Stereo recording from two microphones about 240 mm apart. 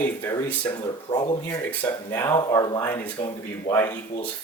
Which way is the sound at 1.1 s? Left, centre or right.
Centre.